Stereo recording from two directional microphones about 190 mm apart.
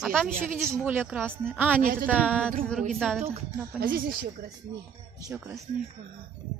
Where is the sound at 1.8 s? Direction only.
45° right (ahead or behind).